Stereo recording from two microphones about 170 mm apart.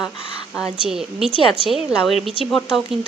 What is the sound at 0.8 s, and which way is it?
A woman's voice, 5° right (ahead or behind).